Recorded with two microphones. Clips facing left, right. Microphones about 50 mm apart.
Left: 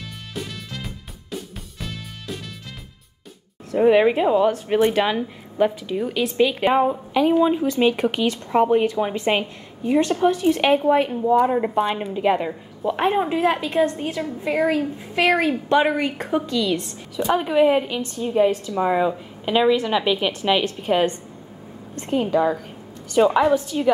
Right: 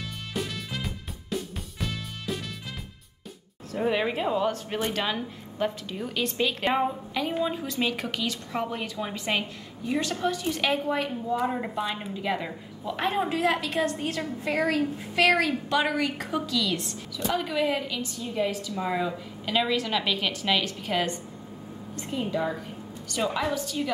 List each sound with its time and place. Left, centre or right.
0.3 s music: centre
3.7 s a woman's voice: left
11.4 s a woman's voice: centre
12.1 s a woman's voice: left
13.9 s a woman's voice: centre
15.7 s a woman's voice: left
22.1 s a woman's voice: left
23.1 s a woman's voice: left